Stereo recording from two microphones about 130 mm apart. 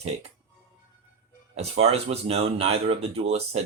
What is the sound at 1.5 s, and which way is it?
Speech, 55° right (ahead or behind).